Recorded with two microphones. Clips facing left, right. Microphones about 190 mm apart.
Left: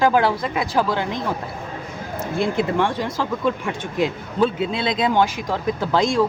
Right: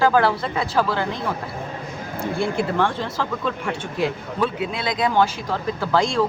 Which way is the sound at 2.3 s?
20° left (ahead or behind).